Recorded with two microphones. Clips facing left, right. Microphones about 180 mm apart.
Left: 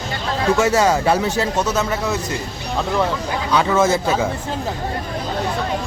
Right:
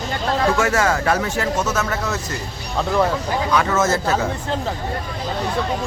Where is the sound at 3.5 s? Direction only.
10° left (ahead or behind).